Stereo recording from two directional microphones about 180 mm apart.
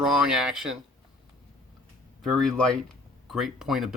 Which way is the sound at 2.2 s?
Centre (ahead or behind).